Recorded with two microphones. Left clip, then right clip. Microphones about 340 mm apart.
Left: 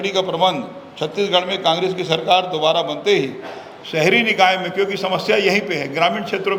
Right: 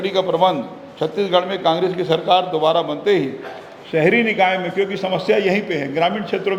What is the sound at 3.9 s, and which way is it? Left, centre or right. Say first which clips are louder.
A man's voice: even; left.